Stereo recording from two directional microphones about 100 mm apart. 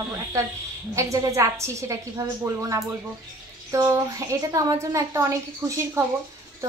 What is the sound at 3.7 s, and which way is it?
A woman's voice, 30° right (ahead or behind).